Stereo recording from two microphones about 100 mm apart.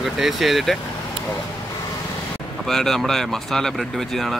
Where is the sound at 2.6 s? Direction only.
5° left (ahead or behind).